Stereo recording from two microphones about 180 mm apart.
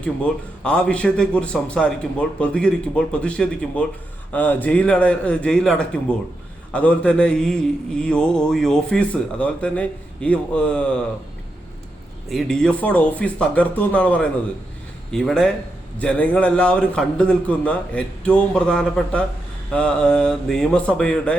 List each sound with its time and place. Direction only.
0.0 s a man's voice: 5° left (ahead or behind)
12.3 s a man's voice: centre (ahead or behind)